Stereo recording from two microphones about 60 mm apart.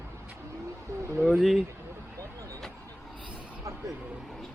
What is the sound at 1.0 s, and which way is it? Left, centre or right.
Speech, right.